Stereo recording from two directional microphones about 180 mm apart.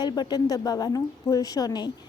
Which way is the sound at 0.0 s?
25° left (ahead or behind).